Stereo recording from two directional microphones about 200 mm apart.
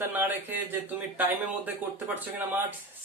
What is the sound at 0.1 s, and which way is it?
Speech, 10° right (ahead or behind).